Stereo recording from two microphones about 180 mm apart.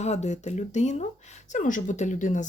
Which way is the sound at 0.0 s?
40° left (ahead or behind).